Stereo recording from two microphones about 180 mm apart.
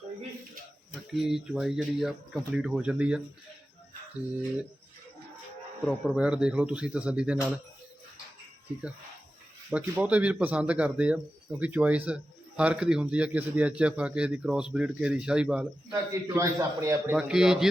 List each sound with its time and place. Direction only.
1.1 s speech: centre (ahead or behind)
5.8 s speech: 5° right (ahead or behind)
9.7 s a man's voice: 10° right (ahead or behind)
15.9 s a man's voice: 15° right (ahead or behind)
17.2 s speech: 5° right (ahead or behind)